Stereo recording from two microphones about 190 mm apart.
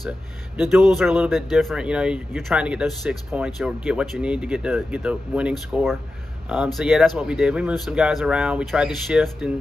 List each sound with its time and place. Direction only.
0.6 s speech: centre (ahead or behind)